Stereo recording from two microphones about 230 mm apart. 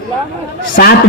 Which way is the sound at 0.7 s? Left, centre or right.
Left.